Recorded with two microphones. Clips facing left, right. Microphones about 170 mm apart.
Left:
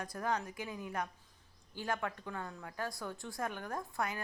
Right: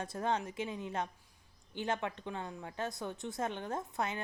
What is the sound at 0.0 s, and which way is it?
A woman's voice, 25° right (ahead or behind).